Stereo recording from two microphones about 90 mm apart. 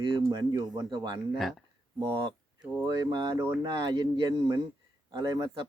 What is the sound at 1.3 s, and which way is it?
Speech, centre (ahead or behind).